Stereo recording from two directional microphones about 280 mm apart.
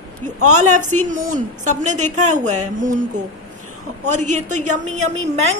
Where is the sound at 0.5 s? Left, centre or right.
Right.